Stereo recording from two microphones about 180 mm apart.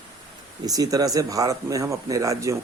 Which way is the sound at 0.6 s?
20° right (ahead or behind).